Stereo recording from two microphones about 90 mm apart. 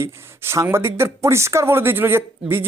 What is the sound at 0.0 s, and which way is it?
Speech, 30° right (ahead or behind).